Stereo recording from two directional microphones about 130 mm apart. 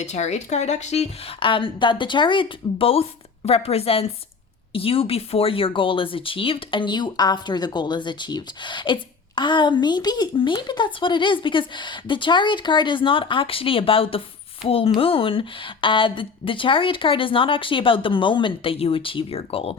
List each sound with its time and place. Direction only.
0.0 s speech: 60° left (ahead or behind)
1.4 s speech: 40° left (ahead or behind)